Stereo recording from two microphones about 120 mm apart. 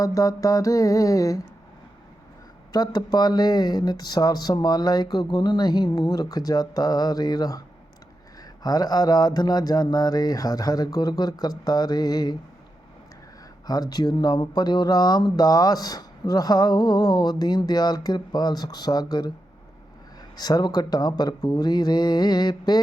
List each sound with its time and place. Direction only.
0.0 s a sound: 30° left (ahead or behind)
2.7 s speech: 35° left (ahead or behind)
13.7 s speech: 35° left (ahead or behind)
20.3 s speech: 35° left (ahead or behind)